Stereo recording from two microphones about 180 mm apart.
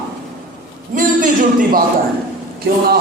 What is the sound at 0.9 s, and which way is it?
Speech, 50° right (ahead or behind).